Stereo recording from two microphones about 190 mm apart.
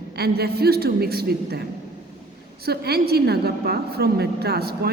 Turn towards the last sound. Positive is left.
turn(degrees=-55)  # may be behind; listen again after turning